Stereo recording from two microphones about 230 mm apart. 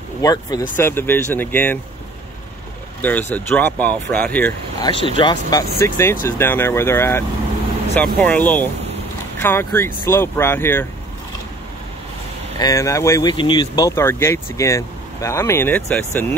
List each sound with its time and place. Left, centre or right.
0.2 s speech: centre
3.0 s speech: centre
12.5 s speech: centre